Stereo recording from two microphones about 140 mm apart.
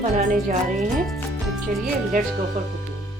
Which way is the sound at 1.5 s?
Centre (ahead or behind).